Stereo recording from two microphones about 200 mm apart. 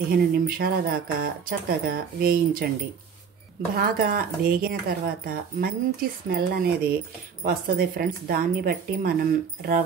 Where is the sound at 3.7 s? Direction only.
50° right (ahead or behind).